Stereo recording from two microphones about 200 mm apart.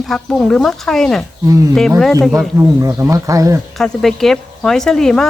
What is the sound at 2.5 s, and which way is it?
Speech, 15° right (ahead or behind).